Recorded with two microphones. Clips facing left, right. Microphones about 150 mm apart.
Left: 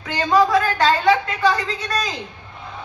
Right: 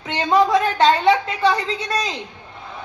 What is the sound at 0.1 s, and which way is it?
A woman's voice, 25° right (ahead or behind).